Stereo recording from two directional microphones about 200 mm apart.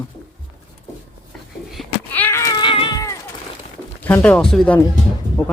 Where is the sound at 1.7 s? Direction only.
10° left (ahead or behind).